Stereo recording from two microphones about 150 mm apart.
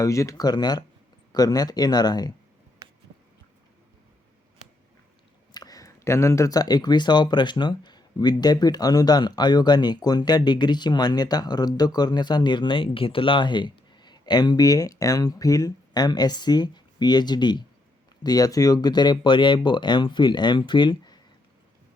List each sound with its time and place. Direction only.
0.0 s speech: 20° left (ahead or behind)
2.8 s a sound: 25° right (ahead or behind)
5.5 s speech: 25° left (ahead or behind)